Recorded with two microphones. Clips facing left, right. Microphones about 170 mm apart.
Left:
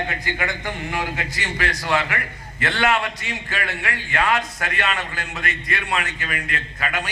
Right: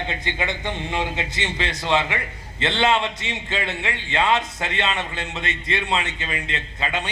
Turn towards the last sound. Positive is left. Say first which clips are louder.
# even
turn(degrees=-25)  # may be behind; listen again after turning